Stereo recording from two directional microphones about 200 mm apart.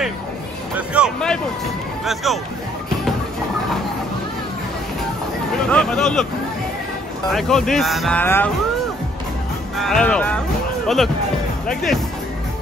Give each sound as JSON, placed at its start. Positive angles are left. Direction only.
{"t": 0.7, "sound": "speech", "side_deg": -5}
{"t": 5.7, "sound": "speech", "side_deg": 5}
{"t": 7.3, "sound": "speech", "side_deg": 0}
{"t": 9.8, "sound": "speech", "side_deg": 5}
{"t": 11.7, "sound": "speech", "side_deg": 0}